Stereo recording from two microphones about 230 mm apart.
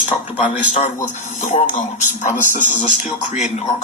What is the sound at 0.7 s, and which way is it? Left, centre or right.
A man's voice, left.